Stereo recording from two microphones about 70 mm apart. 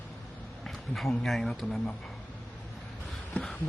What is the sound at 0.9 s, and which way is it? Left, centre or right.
Speech, centre.